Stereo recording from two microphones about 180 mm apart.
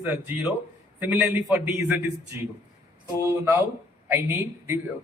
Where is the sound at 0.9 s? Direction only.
10° right (ahead or behind).